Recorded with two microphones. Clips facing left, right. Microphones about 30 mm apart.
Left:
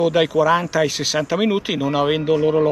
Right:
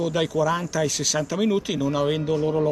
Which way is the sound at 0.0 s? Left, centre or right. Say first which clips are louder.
Left 6 dB; left.